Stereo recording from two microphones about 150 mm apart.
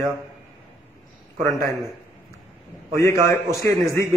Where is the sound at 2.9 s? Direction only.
20° left (ahead or behind).